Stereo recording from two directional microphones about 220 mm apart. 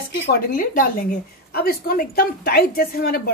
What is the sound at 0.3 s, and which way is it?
A woman's voice, 40° left (ahead or behind).